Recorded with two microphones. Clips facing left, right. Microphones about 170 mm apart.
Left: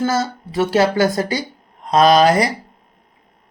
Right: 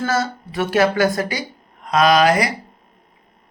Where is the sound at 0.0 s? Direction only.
25° left (ahead or behind).